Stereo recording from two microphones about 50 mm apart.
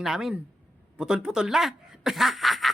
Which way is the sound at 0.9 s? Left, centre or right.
Centre.